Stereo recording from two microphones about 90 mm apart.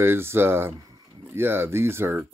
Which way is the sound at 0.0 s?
25° right (ahead or behind).